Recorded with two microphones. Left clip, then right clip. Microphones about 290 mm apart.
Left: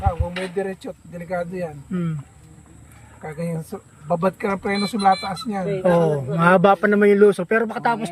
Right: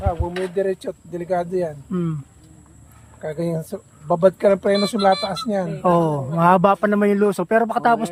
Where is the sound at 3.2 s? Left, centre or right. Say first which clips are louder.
Right 5 dB; centre.